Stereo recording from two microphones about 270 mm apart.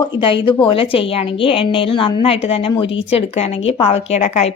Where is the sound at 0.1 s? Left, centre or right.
Centre.